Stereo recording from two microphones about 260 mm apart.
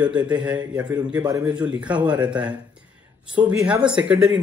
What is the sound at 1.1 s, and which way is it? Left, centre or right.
A man's voice, centre.